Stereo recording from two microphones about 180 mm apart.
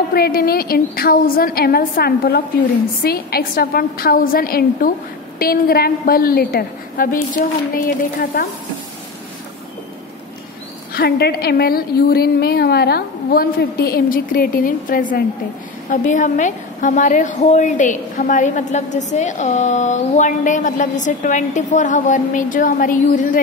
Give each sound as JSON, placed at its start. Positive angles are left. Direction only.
{"t": 0.1, "sound": "a woman's voice", "side_deg": 55}
{"t": 10.9, "sound": "a woman's voice", "side_deg": 60}